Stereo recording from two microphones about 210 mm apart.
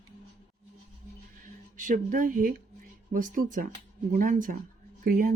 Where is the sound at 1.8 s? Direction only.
40° right (ahead or behind).